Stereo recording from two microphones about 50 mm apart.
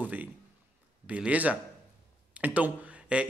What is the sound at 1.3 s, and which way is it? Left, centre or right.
Speech, right.